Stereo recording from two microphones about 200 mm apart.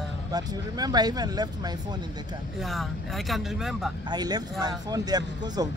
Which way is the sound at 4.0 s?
20° right (ahead or behind).